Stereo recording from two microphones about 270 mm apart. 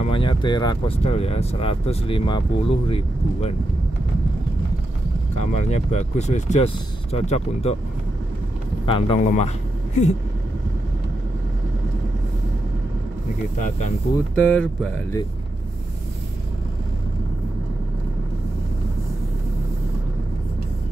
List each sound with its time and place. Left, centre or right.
0.0 s speech: centre
5.5 s speech: left
8.8 s speech: centre
14.3 s speech: centre